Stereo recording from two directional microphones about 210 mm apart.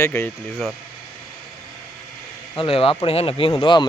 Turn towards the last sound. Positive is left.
turn(degrees=25)  # may be behind; listen again after turning